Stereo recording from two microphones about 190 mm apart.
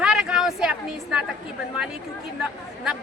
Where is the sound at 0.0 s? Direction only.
5° right (ahead or behind).